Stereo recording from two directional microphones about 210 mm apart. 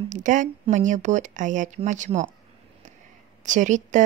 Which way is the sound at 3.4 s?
35° right (ahead or behind).